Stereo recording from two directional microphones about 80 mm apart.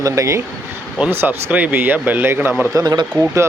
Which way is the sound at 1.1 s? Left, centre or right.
Right.